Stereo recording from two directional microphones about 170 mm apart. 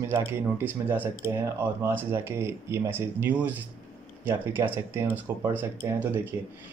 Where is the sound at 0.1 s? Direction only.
15° right (ahead or behind).